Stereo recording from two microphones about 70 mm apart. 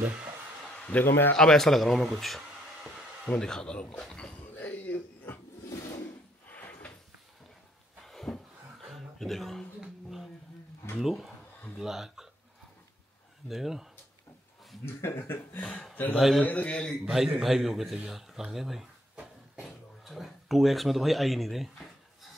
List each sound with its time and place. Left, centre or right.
0.0 s speech: right
0.7 s a sound: left
1.0 s speech: left
1.3 s speech: centre
4.6 s throat clearing: left
6.5 s a sound: left
8.0 s a sound: centre
11.0 s a man's voice: centre
13.5 s a man's voice: centre
15.0 s speech: left
16.1 s a man's voice: centre
16.4 s speech: centre
17.0 s a man's voice: centre